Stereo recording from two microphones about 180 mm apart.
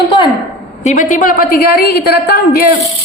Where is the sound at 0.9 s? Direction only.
45° left (ahead or behind).